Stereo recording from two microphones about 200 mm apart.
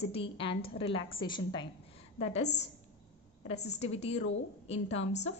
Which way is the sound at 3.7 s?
30° left (ahead or behind).